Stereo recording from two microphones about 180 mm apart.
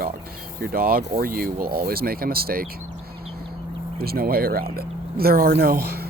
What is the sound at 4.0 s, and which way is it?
Speech, 55° right (ahead or behind).